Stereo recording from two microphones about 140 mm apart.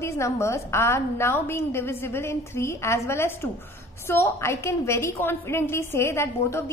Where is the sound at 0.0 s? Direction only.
20° left (ahead or behind).